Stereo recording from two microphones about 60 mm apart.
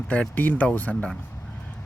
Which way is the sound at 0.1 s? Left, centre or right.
Left.